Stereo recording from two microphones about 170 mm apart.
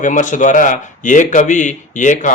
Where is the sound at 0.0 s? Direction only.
50° left (ahead or behind).